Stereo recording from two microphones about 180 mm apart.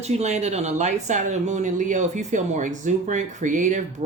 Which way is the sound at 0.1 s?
40° right (ahead or behind).